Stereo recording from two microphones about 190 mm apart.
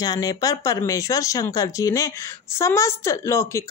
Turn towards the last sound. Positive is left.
turn(degrees=15)  # may be behind; listen again after turning